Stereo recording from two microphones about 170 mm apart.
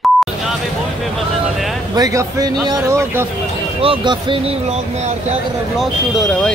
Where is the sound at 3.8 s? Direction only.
30° right (ahead or behind).